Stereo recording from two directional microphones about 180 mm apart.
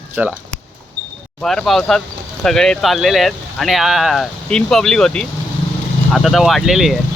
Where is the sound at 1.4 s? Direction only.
Centre (ahead or behind).